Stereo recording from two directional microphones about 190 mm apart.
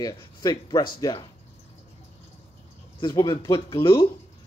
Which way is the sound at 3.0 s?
25° left (ahead or behind).